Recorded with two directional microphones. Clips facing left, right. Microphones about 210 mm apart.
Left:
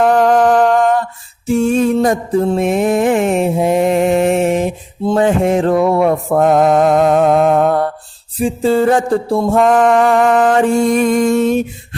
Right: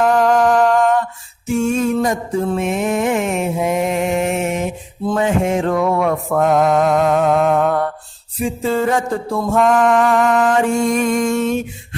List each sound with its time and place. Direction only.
0.0 s music: 35° left (ahead or behind)
1.5 s mantra: 35° left (ahead or behind)